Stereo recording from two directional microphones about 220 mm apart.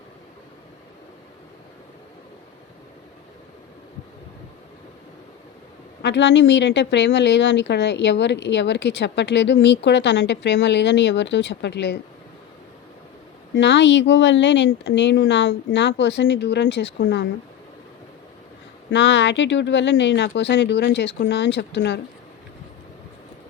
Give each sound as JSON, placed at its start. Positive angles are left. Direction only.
{"t": 6.0, "sound": "a woman's voice", "side_deg": 50}
{"t": 13.5, "sound": "a woman's voice", "side_deg": 55}
{"t": 18.9, "sound": "a woman's voice", "side_deg": 55}